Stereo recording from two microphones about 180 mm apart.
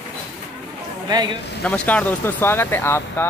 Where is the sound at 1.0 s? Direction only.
25° right (ahead or behind).